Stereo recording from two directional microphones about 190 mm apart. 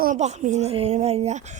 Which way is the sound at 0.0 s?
40° right (ahead or behind).